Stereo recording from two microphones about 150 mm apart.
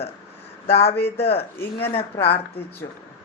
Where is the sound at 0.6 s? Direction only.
45° left (ahead or behind).